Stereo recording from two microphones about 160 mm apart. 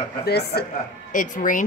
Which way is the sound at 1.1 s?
55° left (ahead or behind).